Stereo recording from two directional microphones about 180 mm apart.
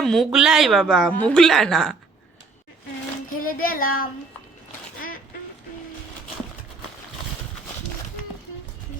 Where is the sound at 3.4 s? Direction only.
55° left (ahead or behind).